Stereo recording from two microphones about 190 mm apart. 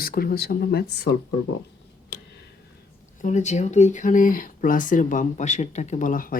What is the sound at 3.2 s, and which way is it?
Speech, 40° left (ahead or behind).